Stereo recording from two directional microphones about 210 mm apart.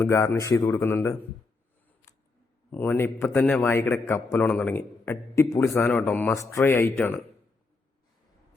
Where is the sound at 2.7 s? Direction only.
10° left (ahead or behind).